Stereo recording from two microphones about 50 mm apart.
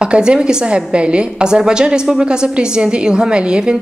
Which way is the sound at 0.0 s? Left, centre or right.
Centre.